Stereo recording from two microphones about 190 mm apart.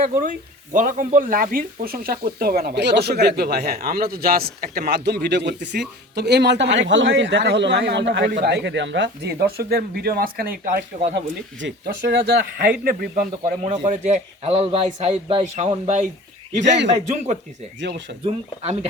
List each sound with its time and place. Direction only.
0.0 s a man's voice: 45° right (ahead or behind)
11.6 s a man's voice: 60° right (ahead or behind); by 16.0 s 35° right (ahead or behind)
17.7 s a man's voice: 70° right (ahead or behind)
18.3 s a man's voice: 35° right (ahead or behind)